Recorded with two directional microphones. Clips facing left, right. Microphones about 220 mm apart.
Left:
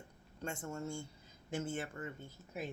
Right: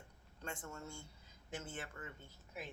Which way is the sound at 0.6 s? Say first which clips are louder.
Left 7 dB; 30° left (ahead or behind).